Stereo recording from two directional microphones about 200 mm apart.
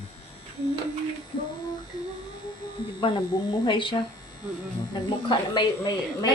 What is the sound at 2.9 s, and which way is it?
A woman's voice, 20° left (ahead or behind).